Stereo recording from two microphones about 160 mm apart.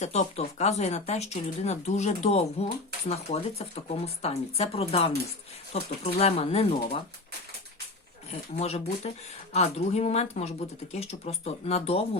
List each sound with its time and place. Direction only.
0.0 s speech: 45° left (ahead or behind)
8.3 s speech: 40° left (ahead or behind)